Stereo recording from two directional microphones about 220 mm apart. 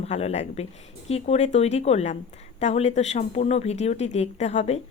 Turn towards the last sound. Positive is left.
turn(degrees=30)  # may be behind; listen again after turning